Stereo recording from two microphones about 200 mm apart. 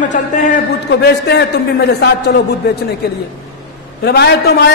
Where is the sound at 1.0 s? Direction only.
55° left (ahead or behind).